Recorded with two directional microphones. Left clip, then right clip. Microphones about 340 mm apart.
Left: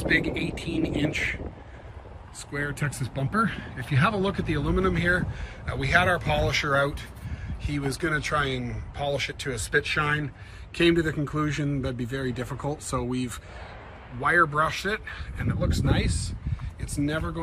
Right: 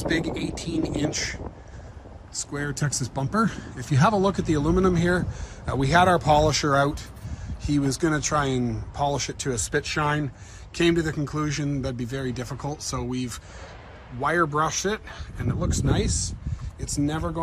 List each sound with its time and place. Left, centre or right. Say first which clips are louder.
0.0 s speech: left 2 dB; centre
0.5 s speech: right 1 dB; right
0.9 s speech: left 1 dB; centre
2.5 s speech: even; centre